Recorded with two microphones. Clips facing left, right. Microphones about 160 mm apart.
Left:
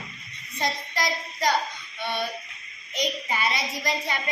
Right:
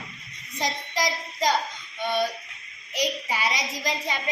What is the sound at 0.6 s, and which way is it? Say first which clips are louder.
Speech: right 1 dB; 15° right (ahead or behind).